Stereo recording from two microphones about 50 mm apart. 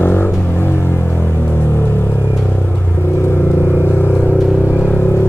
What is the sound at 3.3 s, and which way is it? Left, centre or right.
Vehicle, left.